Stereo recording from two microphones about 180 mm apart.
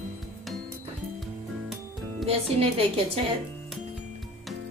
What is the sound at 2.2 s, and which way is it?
Speech, 30° right (ahead or behind).